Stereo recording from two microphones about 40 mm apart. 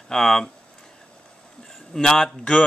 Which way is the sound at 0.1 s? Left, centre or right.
Centre.